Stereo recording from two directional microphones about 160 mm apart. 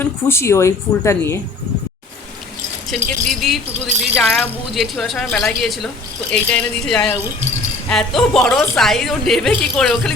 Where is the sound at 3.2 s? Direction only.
Centre (ahead or behind).